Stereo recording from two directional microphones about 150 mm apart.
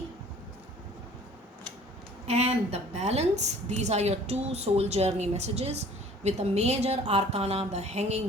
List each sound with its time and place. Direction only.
2.2 s a woman's voice: 45° right (ahead or behind)